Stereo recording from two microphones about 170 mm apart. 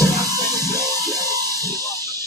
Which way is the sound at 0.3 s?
20° right (ahead or behind).